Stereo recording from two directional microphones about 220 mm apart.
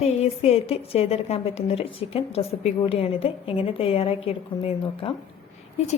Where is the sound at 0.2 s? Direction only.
25° left (ahead or behind).